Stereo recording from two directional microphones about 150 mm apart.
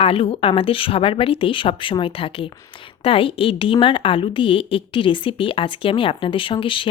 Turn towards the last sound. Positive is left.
turn(degrees=35)  # may be behind; listen again after turning